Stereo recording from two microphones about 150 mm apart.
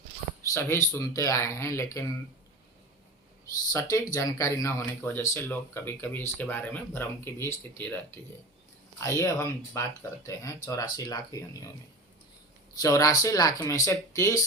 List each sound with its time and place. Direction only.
0.4 s speech: 20° left (ahead or behind)
3.7 s speech: 20° left (ahead or behind)
9.0 s speech: 20° left (ahead or behind)
12.8 s speech: 25° left (ahead or behind)